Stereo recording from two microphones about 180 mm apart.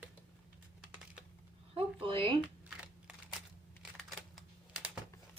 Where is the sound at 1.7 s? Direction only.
30° right (ahead or behind).